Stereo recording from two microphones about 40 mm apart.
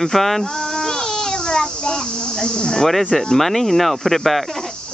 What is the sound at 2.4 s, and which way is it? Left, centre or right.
Speech, centre.